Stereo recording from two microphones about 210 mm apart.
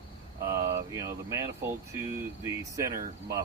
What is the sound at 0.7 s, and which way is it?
Speech, 15° right (ahead or behind).